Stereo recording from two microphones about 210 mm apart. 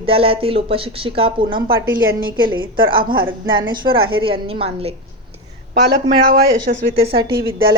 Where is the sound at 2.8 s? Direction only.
45° right (ahead or behind).